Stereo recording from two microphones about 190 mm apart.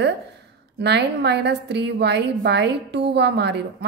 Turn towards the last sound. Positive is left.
turn(degrees=-65)  # may be behind; listen again after turning